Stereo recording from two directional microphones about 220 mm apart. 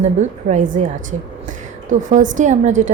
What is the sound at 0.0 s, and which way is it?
Speech, 30° right (ahead or behind).